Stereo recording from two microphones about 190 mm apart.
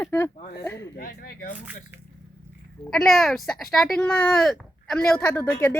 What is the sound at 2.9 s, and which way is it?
A woman's voice, centre (ahead or behind).